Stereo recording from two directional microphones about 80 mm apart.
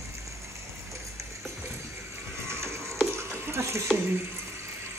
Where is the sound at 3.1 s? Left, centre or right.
Right.